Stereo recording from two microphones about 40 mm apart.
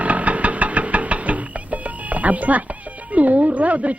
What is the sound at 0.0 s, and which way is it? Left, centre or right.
Music, right.